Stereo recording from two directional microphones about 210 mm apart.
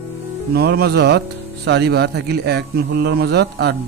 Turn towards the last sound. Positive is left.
turn(degrees=-50)  # may be behind; listen again after turning